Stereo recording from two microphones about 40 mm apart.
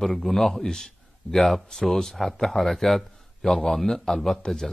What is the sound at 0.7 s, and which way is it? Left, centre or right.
Speech, centre.